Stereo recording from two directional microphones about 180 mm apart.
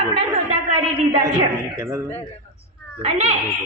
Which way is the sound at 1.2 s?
15° right (ahead or behind).